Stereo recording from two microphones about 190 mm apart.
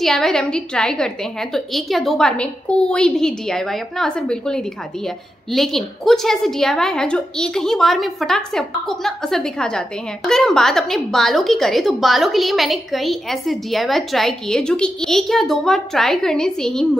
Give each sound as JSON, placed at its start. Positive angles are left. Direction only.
{"t": 0.0, "sound": "a woman's voice", "side_deg": 0}